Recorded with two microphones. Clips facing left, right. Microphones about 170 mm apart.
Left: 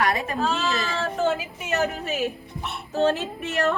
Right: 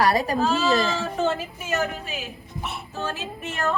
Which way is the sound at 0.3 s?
Centre (ahead or behind).